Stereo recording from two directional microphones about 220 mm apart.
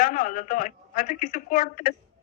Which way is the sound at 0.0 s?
35° left (ahead or behind).